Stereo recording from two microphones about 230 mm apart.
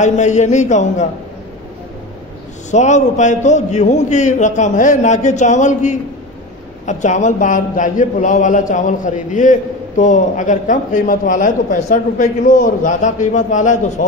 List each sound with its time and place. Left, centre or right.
0.0 s a man's voice: left
2.7 s a man's voice: left